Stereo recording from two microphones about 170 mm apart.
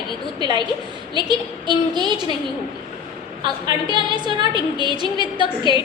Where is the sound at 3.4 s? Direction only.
25° right (ahead or behind).